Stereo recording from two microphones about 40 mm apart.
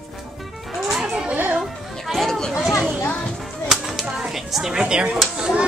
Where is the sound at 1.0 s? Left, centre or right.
Right.